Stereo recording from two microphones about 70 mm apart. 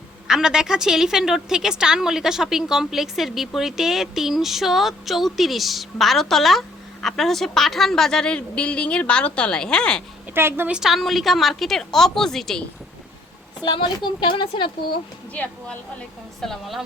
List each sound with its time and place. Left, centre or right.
0.3 s a woman's voice: centre
10.3 s a woman's voice: right
10.7 s a woman's voice: centre
13.7 s a woman's voice: left
15.4 s a woman's voice: centre
16.4 s a woman's voice: centre